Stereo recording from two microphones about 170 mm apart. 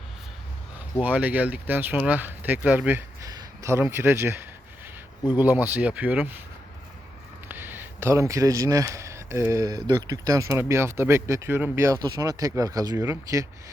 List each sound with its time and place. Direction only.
1.0 s speech: 10° right (ahead or behind)
3.2 s speech: 20° right (ahead or behind)
7.4 s speech: 10° right (ahead or behind)